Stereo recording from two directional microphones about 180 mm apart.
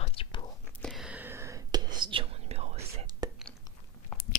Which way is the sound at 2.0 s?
30° right (ahead or behind).